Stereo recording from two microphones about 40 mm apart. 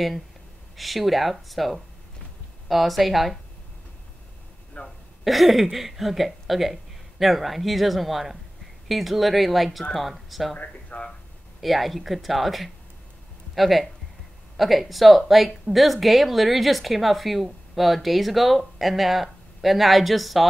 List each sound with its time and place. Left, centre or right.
0.7 s speech: centre
4.8 s speech: left
5.2 s speech: centre
10.6 s speech: left
11.6 s speech: centre